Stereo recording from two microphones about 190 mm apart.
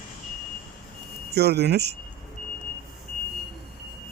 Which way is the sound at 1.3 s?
60° right (ahead or behind).